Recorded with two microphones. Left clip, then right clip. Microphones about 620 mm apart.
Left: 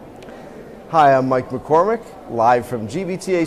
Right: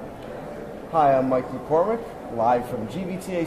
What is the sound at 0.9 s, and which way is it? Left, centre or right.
A man's voice, left.